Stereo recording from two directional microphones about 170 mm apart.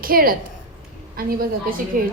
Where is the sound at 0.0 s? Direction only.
60° right (ahead or behind).